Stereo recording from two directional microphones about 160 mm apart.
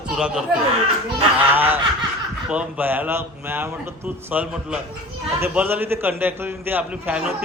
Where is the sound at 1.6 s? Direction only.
10° right (ahead or behind).